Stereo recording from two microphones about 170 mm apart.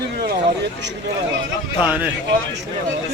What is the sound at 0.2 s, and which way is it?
Vehicle, 90° right.